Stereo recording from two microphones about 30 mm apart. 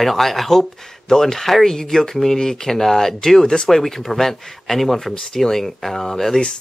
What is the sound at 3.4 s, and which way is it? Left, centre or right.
Speech, left.